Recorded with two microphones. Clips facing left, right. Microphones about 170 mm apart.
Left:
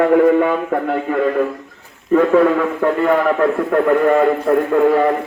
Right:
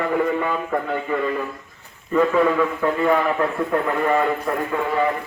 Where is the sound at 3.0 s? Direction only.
55° left (ahead or behind).